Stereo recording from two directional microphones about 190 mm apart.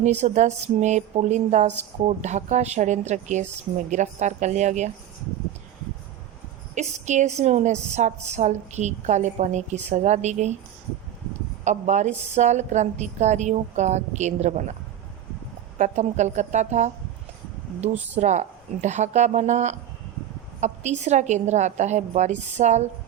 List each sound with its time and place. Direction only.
0.0 s a woman's voice: 35° right (ahead or behind)
6.7 s a woman's voice: 40° right (ahead or behind)
11.6 s a woman's voice: 40° right (ahead or behind)
15.8 s a woman's voice: 40° right (ahead or behind)
18.2 s a woman's voice: 40° right (ahead or behind)